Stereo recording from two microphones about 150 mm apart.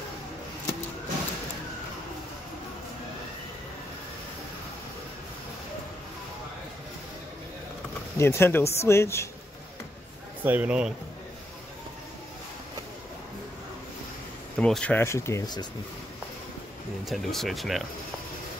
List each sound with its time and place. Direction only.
8.2 s speech: 15° left (ahead or behind)
10.4 s a man's voice: 10° right (ahead or behind)
14.6 s speech: 5° left (ahead or behind); by 15.6 s 25° left (ahead or behind)
17.0 s speech: centre (ahead or behind)